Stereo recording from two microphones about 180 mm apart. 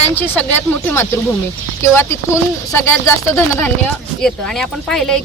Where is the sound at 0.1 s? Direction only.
10° left (ahead or behind).